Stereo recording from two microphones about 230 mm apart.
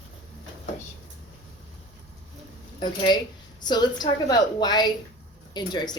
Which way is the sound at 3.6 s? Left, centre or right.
Centre.